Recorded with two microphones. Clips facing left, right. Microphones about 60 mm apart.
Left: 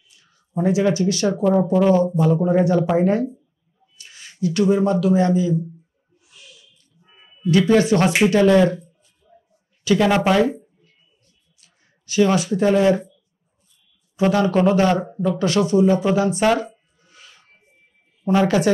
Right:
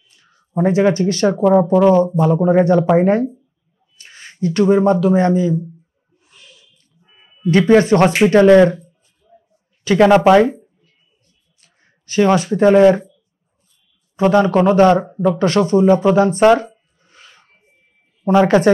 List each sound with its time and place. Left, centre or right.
0.1 s speech: right
6.1 s snort: right
7.4 s speech: right
9.8 s speech: right
11.6 s speech: right
14.1 s speech: right
16.2 s a sound: right
18.2 s speech: right